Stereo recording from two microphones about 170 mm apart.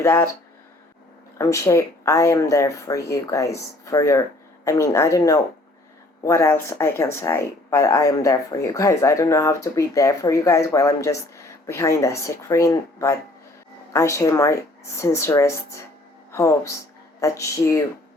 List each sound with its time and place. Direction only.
0.0 s speech: 10° left (ahead or behind)
1.4 s speech: 15° left (ahead or behind)